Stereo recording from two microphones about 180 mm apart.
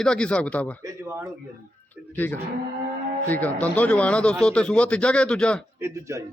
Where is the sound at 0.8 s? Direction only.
15° right (ahead or behind).